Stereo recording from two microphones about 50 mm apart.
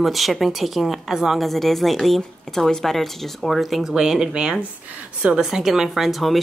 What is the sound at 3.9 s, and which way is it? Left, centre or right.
Speech, centre.